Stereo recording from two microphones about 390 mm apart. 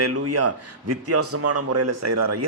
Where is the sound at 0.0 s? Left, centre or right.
Right.